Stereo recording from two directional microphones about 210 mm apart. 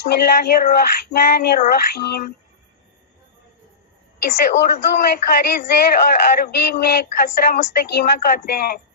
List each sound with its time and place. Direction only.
0.0 s speech: 50° left (ahead or behind)
4.4 s speech: 50° left (ahead or behind)